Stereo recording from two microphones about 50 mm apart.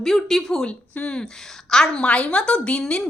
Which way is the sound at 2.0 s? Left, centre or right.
Left.